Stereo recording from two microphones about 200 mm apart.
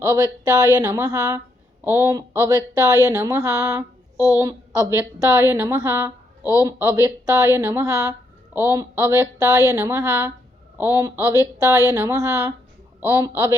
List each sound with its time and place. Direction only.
0.0 s a woman's voice: 15° right (ahead or behind)